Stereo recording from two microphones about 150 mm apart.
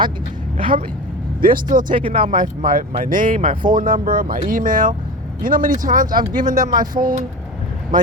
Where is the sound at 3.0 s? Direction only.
65° right (ahead or behind).